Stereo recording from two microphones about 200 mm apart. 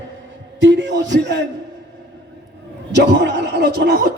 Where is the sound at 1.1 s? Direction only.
60° right (ahead or behind).